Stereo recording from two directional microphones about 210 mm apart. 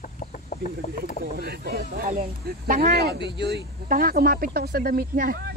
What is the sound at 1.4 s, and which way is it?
Speech, 50° right (ahead or behind).